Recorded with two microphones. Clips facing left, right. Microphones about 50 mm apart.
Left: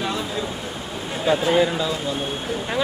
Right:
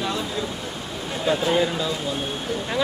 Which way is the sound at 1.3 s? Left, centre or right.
Centre.